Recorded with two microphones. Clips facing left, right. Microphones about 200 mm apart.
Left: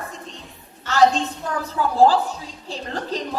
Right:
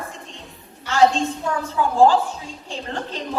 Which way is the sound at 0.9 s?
35° left (ahead or behind).